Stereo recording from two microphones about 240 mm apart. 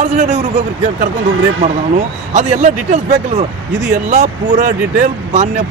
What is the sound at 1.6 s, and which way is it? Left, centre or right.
Speech, right.